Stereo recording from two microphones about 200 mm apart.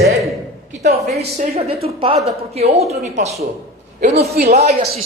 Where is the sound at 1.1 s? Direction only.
30° right (ahead or behind).